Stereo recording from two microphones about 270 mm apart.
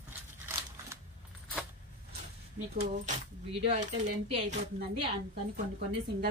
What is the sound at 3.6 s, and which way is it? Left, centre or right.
Speech, right.